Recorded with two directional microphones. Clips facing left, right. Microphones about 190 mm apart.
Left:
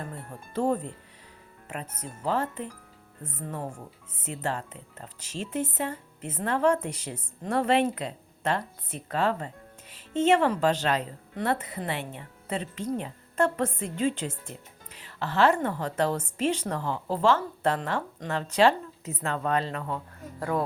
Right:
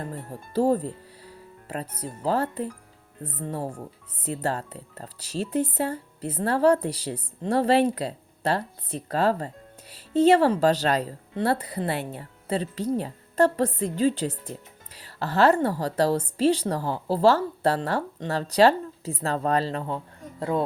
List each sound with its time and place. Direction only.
0.0 s speech: 35° right (ahead or behind)